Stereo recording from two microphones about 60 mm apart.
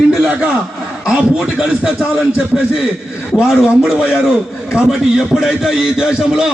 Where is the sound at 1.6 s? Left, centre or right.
Centre.